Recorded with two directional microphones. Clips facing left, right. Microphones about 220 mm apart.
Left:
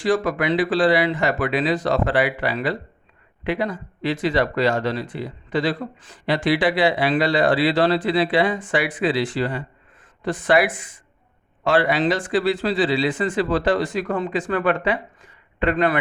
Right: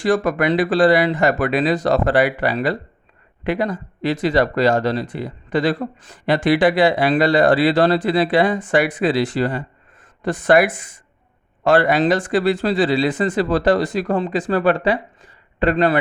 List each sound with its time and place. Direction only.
0.0 s a man's voice: 50° right (ahead or behind); by 16.0 s 30° right (ahead or behind)